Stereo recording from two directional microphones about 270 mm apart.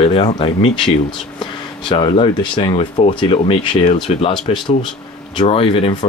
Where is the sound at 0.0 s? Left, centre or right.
Centre.